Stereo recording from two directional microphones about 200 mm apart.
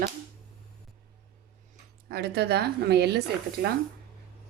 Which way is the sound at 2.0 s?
50° right (ahead or behind).